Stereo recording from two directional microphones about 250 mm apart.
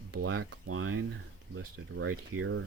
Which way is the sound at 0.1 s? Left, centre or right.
Right.